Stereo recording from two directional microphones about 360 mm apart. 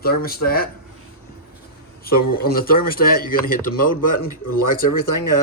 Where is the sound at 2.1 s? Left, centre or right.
Left.